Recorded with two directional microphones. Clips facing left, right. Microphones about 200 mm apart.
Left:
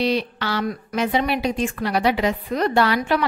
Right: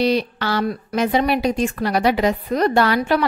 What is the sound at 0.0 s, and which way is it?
A woman's voice, 40° right (ahead or behind).